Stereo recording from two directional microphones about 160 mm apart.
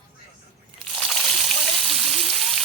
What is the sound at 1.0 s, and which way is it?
Water, centre (ahead or behind).